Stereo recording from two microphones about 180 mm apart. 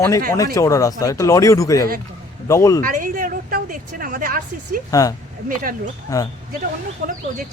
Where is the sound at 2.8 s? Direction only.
50° right (ahead or behind).